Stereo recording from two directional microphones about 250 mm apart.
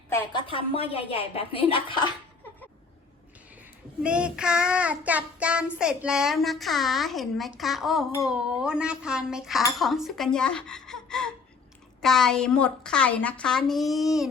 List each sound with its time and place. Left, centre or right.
0.1 s a woman's voice: centre
4.0 s child singing: centre